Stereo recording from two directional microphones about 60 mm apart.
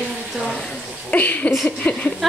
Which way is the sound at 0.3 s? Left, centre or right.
Centre.